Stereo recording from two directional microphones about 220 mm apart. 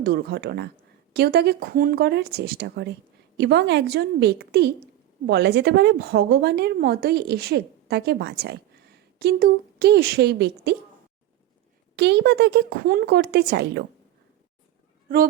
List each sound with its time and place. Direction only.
0.0 s a woman's voice: 45° right (ahead or behind)
11.9 s a woman's voice: 50° right (ahead or behind)